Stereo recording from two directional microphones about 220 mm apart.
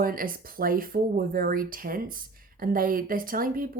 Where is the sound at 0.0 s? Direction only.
40° right (ahead or behind).